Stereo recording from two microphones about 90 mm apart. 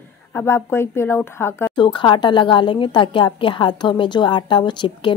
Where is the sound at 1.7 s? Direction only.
60° left (ahead or behind).